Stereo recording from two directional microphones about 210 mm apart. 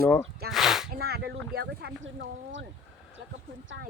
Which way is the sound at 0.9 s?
50° right (ahead or behind).